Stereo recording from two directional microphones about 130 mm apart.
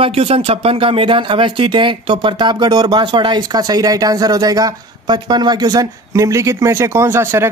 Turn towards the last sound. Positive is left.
turn(degrees=-20)  # may be behind; listen again after turning